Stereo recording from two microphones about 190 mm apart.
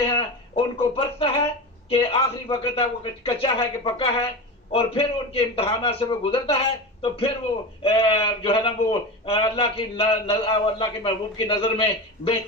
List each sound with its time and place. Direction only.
0.0 s a man's voice: 30° left (ahead or behind)
7.8 s a man's voice: 30° left (ahead or behind)